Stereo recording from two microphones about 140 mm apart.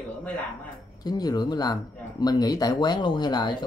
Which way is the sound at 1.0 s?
30° left (ahead or behind).